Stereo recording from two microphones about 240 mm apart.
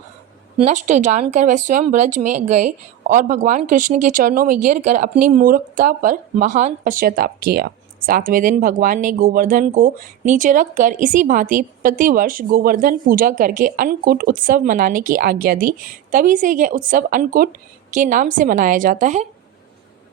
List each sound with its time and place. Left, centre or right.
0.6 s speech: right